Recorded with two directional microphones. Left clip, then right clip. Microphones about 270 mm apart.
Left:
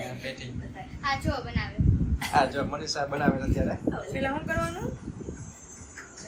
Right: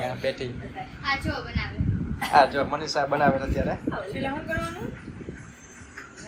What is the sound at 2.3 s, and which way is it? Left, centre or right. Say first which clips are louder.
A man's voice: right 6 dB; centre.